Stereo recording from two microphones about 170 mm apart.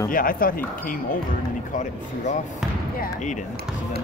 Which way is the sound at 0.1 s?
55° left (ahead or behind).